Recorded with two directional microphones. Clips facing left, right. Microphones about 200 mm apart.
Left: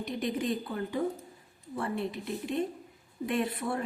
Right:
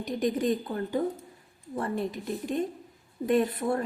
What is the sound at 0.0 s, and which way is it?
A woman's voice, 40° right (ahead or behind).